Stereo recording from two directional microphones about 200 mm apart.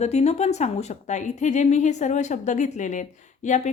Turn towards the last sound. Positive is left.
turn(degrees=35)  # may be behind; listen again after turning